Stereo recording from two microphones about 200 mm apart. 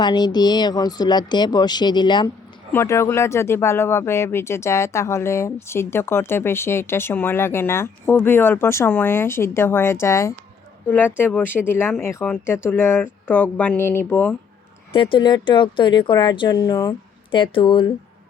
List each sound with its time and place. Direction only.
0.0 s speech: 20° left (ahead or behind)
14.9 s speech: 25° left (ahead or behind)